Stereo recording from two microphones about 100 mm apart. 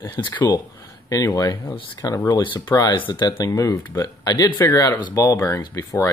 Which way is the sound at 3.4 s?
30° left (ahead or behind).